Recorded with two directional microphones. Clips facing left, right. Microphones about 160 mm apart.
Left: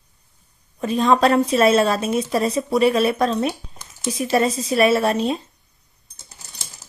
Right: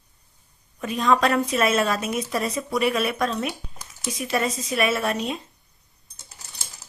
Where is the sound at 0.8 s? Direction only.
30° left (ahead or behind).